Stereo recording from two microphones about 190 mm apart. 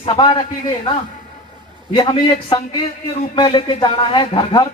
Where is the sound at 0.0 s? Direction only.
25° left (ahead or behind).